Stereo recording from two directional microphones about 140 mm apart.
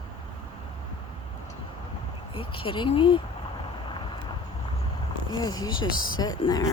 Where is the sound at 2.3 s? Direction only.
40° left (ahead or behind).